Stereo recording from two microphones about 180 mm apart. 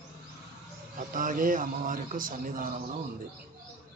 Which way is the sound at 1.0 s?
50° right (ahead or behind).